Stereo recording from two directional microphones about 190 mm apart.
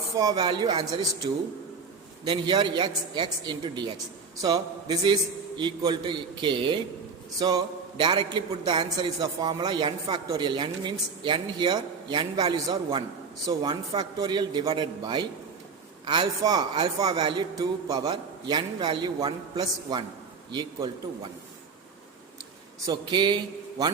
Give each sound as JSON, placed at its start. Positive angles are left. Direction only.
{"t": 0.2, "sound": "a man's voice", "side_deg": -20}
{"t": 22.9, "sound": "a man's voice", "side_deg": -25}